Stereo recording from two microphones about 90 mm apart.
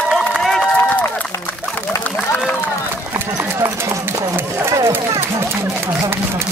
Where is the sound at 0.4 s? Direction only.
5° left (ahead or behind).